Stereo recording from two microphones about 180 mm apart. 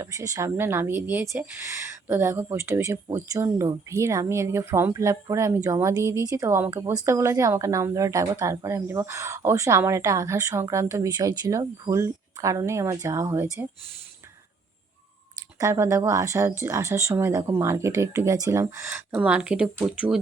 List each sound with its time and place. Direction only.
0.0 s speech: 20° right (ahead or behind)
15.5 s speech: 15° right (ahead or behind)